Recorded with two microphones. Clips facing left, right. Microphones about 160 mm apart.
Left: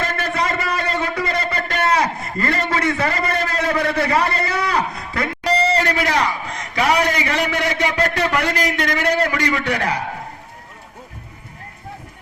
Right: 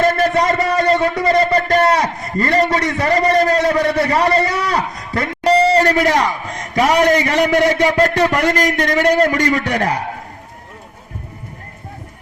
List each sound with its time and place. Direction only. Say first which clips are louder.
0.0 s a man's voice: right 8 dB; 40° right (ahead or behind)